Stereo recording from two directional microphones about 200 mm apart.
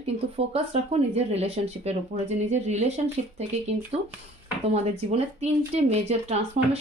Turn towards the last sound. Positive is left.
turn(degrees=-30)  # may be behind; listen again after turning